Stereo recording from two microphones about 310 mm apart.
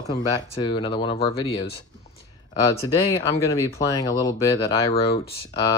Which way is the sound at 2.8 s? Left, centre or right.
Centre.